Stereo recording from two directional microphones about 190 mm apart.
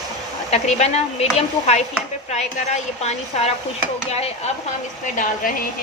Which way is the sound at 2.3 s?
35° left (ahead or behind).